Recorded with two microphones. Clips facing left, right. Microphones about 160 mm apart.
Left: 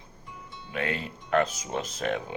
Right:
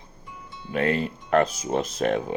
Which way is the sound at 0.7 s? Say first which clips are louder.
Right 8 dB; 40° right (ahead or behind).